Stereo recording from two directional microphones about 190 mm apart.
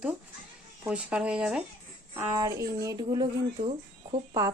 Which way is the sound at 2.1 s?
20° right (ahead or behind).